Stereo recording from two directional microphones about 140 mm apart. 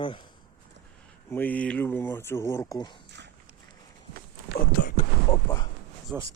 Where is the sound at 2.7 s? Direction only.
30° left (ahead or behind).